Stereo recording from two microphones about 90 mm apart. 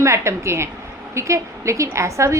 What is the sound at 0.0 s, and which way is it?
A woman's voice, 30° right (ahead or behind).